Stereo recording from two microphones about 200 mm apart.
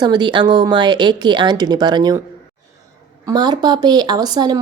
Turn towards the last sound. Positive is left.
turn(degrees=-20)  # may be behind; listen again after turning